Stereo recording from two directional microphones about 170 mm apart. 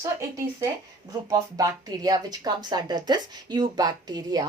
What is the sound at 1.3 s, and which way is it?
Speech, 20° right (ahead or behind).